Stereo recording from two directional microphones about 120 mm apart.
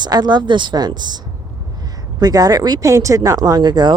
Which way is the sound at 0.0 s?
35° right (ahead or behind).